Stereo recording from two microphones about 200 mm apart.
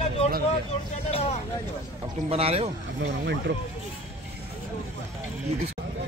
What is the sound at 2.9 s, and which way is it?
Speech, 60° right (ahead or behind).